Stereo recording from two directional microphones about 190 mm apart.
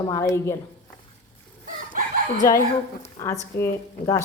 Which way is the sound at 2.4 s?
15° left (ahead or behind).